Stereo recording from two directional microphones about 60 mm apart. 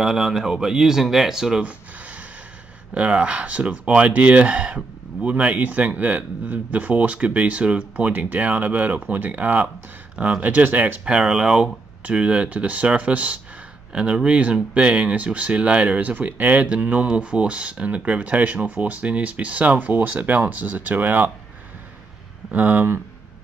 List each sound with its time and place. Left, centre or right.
0.0 s speech: centre
1.6 s a sound: right
2.9 s speech: right
11.1 s speech: centre
12.0 s speech: right
22.5 s speech: right